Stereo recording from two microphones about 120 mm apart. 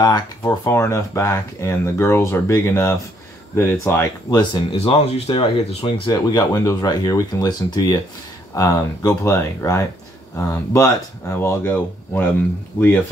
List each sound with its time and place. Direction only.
0.0 s speech: 35° left (ahead or behind)
0.5 s speech: 20° left (ahead or behind)
4.7 s speech: 55° left (ahead or behind)
6.1 s speech: 30° left (ahead or behind); by 12.4 s 15° left (ahead or behind)